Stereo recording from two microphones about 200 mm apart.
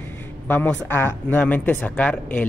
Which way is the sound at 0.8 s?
10° left (ahead or behind).